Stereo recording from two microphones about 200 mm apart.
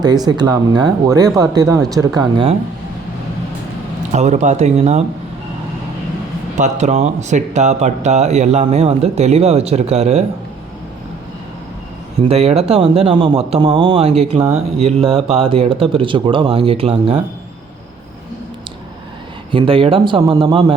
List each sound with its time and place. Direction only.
0.0 s speech: 20° right (ahead or behind)
4.1 s speech: 35° right (ahead or behind)
6.6 s speech: 35° right (ahead or behind)
12.2 s speech: 30° right (ahead or behind)
19.5 s speech: 25° right (ahead or behind)